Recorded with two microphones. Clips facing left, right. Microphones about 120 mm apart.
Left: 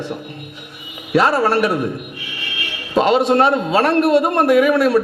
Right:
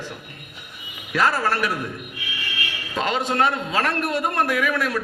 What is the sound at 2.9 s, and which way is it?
A man's voice, 20° left (ahead or behind).